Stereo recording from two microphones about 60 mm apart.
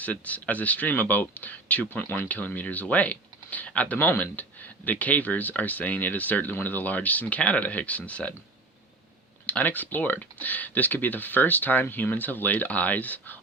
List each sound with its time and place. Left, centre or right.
0.0 s speech: left
3.9 s speech: left
9.5 s speech: left